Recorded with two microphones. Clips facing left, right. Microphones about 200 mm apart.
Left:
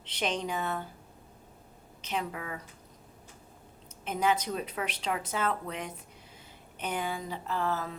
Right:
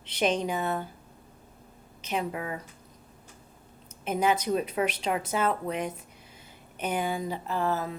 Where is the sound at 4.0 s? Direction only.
10° right (ahead or behind).